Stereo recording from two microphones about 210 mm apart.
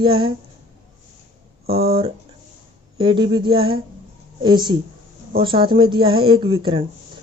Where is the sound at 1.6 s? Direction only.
45° right (ahead or behind).